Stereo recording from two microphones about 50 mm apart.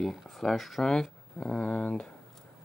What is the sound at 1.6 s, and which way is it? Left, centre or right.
Speech, left.